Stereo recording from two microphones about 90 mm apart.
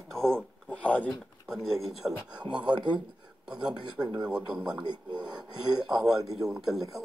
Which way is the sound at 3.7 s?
50° right (ahead or behind).